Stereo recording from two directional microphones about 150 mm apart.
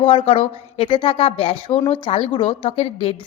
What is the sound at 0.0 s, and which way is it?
A woman's voice, 35° left (ahead or behind).